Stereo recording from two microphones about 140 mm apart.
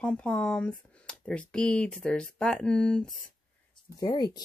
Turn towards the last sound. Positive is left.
turn(degrees=30)  # may be behind; listen again after turning